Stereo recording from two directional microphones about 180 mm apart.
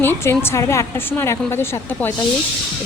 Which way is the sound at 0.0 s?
10° left (ahead or behind).